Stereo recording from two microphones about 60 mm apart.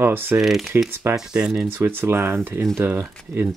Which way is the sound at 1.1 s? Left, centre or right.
Centre.